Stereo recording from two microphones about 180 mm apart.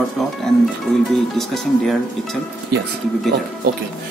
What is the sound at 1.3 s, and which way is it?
Speech, centre (ahead or behind).